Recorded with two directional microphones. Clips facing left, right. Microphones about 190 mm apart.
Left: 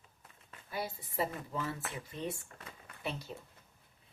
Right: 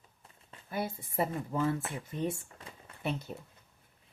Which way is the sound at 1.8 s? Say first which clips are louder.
Right 4 dB; 25° right (ahead or behind).